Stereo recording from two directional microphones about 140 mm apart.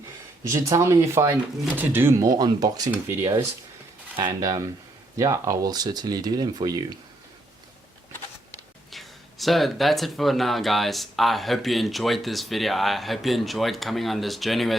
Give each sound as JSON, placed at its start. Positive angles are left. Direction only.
{"t": 0.4, "sound": "speech", "side_deg": -20}
{"t": 4.3, "sound": "speech", "side_deg": -25}
{"t": 8.9, "sound": "speech", "side_deg": 0}